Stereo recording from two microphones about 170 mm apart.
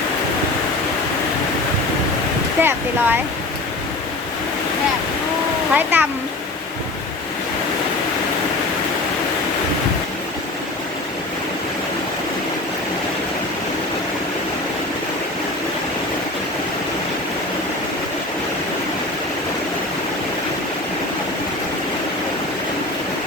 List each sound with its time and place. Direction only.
2.6 s speech: 10° right (ahead or behind)
5.7 s a child's voice: 10° right (ahead or behind)